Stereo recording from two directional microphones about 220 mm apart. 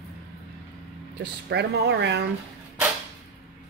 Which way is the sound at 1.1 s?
50° right (ahead or behind).